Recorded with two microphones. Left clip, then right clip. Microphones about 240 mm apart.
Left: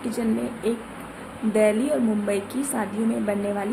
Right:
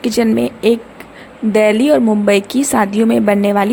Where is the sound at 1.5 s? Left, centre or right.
Right.